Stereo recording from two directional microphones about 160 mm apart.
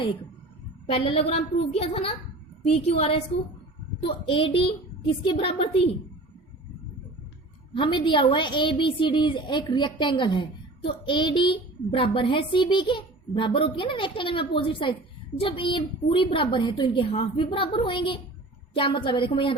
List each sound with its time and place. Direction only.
0.9 s a child's voice: 35° left (ahead or behind)
7.8 s a child's voice: 30° left (ahead or behind)